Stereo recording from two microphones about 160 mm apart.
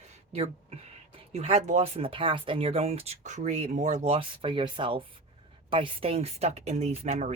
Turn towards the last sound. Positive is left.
turn(degrees=-45)  # may be behind; listen again after turning